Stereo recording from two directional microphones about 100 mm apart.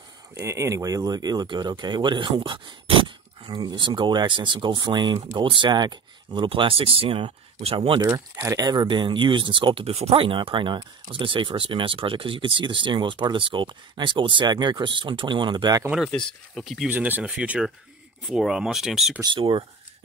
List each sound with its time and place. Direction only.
0.3 s speech: 30° right (ahead or behind); by 8.1 s 55° right (ahead or behind)
8.1 s speech: 30° right (ahead or behind); by 15.8 s 45° right (ahead or behind)
16.5 s speech: centre (ahead or behind)
16.9 s speech: 15° right (ahead or behind)
19.2 s speech: 55° right (ahead or behind)